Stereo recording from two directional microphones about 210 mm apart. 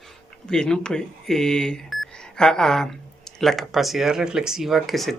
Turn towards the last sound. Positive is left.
turn(degrees=0)  # may be behind; listen again after turning